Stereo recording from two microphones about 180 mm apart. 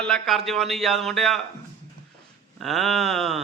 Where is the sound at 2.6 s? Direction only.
Centre (ahead or behind).